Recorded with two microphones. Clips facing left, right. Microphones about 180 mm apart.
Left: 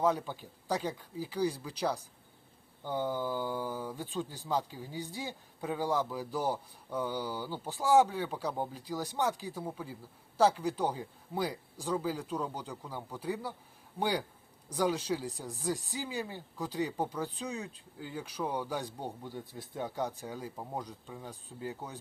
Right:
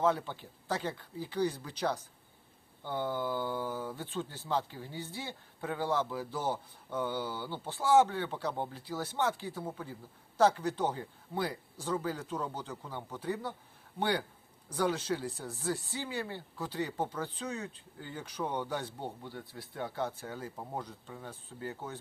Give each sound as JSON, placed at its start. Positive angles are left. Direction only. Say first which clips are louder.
{"t": 0.0, "sound": "speech", "louder": "even", "side_deg": 15}